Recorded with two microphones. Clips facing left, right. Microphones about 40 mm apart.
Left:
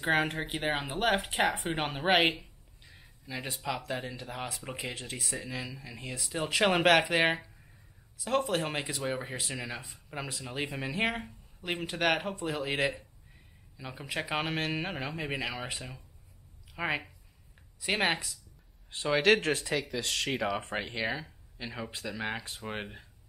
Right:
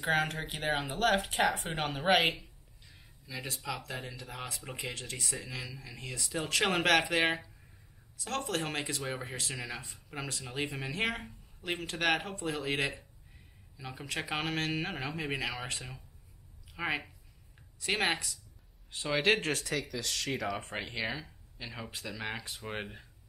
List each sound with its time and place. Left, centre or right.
0.0 s speech: centre
19.4 s speech: left; by 23.0 s centre